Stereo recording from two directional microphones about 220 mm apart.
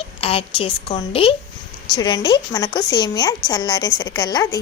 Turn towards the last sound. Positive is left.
turn(degrees=15)  # may be behind; listen again after turning